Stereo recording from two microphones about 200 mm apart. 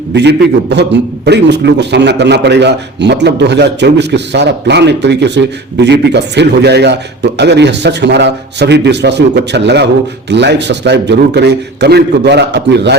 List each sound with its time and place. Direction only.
0.1 s a man's voice: 60° right (ahead or behind)